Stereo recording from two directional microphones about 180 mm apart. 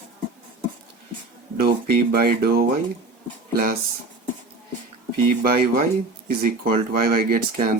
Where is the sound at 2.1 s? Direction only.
55° right (ahead or behind).